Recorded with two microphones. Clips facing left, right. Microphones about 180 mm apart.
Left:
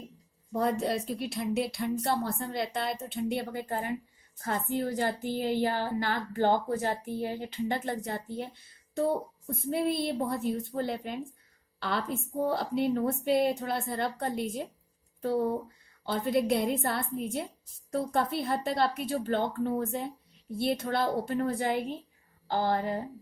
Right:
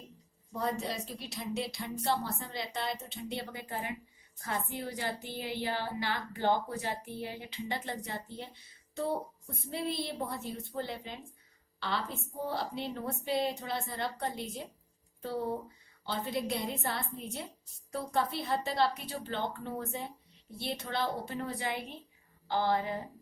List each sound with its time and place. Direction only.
0.5 s a woman's voice: 55° left (ahead or behind)
9.6 s a woman's voice: 55° left (ahead or behind)
16.0 s a woman's voice: 55° left (ahead or behind)